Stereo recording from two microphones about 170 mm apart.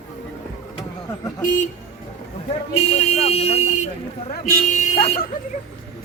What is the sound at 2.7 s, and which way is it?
Speech, 35° left (ahead or behind).